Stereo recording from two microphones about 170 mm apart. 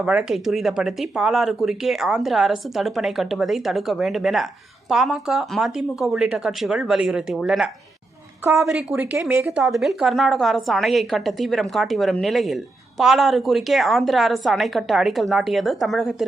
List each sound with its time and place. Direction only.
0.0 s speech: 5° right (ahead or behind)
8.4 s speech: 15° right (ahead or behind); by 16.2 s centre (ahead or behind)